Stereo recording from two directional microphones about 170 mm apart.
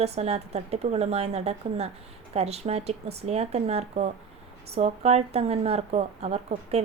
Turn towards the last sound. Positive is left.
turn(degrees=-40)  # may be behind; listen again after turning